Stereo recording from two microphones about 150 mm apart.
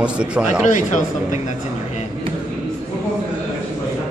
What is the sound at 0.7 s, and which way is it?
Speech, 55° left (ahead or behind).